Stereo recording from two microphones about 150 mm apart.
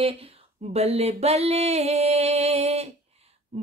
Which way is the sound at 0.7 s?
45° right (ahead or behind).